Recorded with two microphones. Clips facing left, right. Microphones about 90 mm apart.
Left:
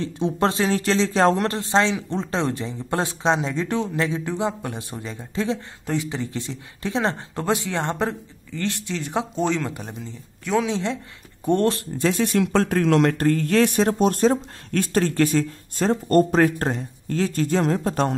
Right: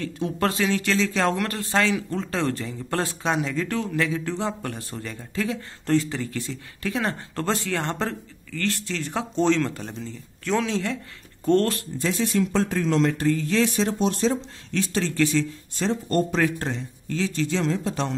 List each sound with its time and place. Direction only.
0.0 s a man's voice: 25° left (ahead or behind)
5.9 s a man's voice: 15° left (ahead or behind)
12.0 s speech: 60° left (ahead or behind)